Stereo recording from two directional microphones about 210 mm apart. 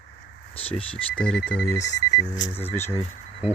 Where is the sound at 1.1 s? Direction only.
5° left (ahead or behind).